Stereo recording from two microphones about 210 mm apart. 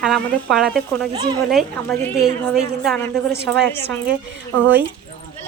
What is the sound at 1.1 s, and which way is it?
Speech, 20° right (ahead or behind).